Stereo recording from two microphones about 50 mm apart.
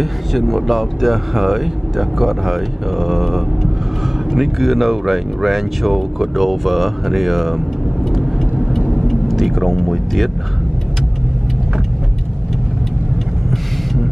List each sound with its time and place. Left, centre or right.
0.0 s speech: centre
9.0 s speech: centre